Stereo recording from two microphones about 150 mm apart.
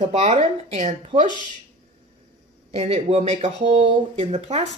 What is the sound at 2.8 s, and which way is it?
Speech, 40° right (ahead or behind).